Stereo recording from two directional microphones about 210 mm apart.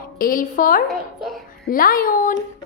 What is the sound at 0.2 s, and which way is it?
A woman's voice, 40° left (ahead or behind).